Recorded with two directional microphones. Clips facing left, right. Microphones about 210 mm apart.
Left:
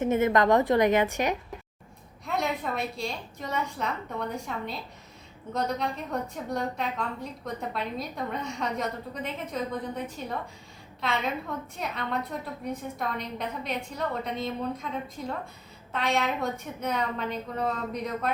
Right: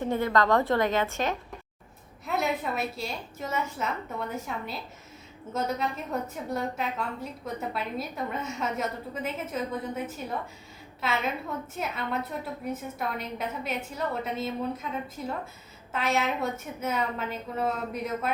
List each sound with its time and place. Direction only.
0.0 s a woman's voice: 20° left (ahead or behind)
2.2 s a woman's voice: 5° right (ahead or behind)